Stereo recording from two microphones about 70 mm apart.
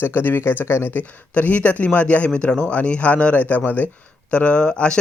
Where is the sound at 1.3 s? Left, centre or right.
Left.